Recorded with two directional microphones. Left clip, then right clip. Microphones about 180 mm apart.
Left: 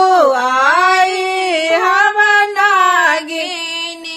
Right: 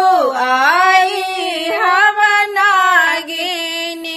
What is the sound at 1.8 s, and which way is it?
Singing, 20° right (ahead or behind).